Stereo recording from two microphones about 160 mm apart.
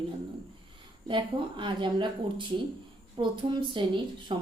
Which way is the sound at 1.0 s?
30° right (ahead or behind).